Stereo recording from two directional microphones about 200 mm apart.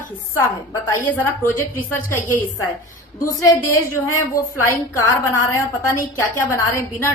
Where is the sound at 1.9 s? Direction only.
10° left (ahead or behind).